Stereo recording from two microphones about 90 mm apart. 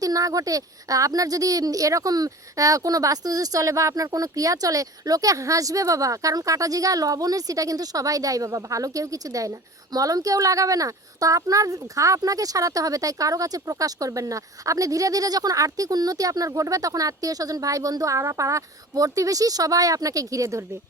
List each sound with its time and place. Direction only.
0.0 s a woman's voice: 40° right (ahead or behind)